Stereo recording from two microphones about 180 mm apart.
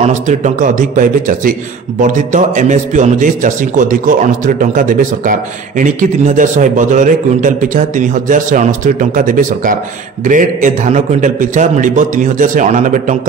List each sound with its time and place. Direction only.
0.0 s a man's voice: 40° right (ahead or behind)